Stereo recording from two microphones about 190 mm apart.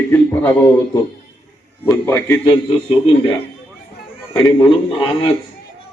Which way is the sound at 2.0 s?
10° left (ahead or behind).